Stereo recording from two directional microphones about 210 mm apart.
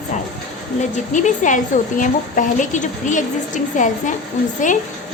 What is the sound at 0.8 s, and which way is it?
A woman's voice, 35° left (ahead or behind).